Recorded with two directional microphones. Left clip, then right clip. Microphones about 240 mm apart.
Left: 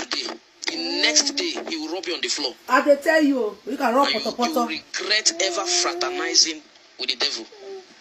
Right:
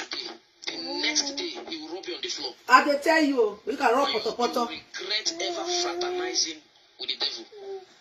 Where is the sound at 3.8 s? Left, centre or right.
Left.